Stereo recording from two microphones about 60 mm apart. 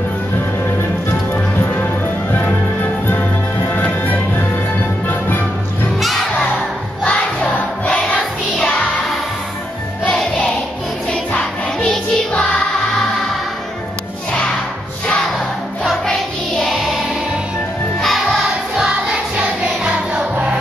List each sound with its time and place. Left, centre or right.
1.3 s music: left
3.7 s music: left
5.9 s crowd: centre
7.1 s music: centre
8.2 s music: centre
11.1 s music: centre
16.1 s music: centre
16.7 s music: centre
18.0 s music: centre
18.5 s music: centre